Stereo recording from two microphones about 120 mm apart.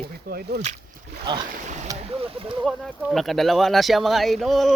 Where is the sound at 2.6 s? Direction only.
Centre (ahead or behind).